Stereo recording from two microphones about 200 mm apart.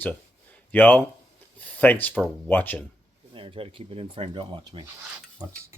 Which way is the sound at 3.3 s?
25° right (ahead or behind).